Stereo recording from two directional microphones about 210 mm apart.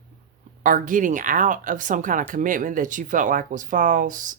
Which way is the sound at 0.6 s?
40° right (ahead or behind).